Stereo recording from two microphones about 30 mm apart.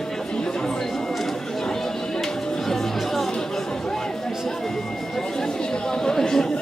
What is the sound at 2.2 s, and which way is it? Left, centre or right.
Music, centre.